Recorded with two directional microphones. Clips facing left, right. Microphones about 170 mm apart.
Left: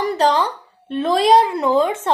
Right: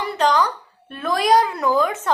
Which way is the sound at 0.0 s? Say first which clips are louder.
Left 2 dB; 35° left (ahead or behind).